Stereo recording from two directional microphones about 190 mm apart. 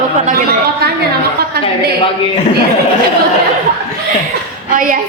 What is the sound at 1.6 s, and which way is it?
Speech, 55° right (ahead or behind).